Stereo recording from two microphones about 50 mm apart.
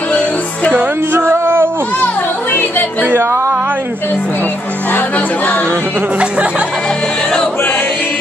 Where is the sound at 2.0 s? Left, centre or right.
Left.